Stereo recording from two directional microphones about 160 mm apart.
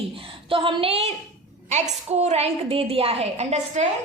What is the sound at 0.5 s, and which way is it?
A woman's voice, 35° right (ahead or behind).